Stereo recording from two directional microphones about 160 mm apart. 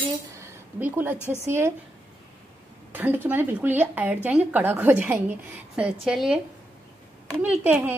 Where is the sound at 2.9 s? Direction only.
10° right (ahead or behind).